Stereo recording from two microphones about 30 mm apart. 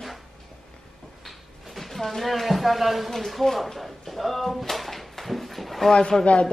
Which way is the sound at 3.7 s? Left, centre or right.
Centre.